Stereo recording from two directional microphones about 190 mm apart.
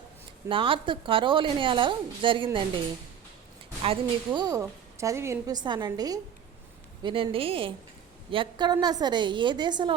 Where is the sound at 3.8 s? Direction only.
25° right (ahead or behind).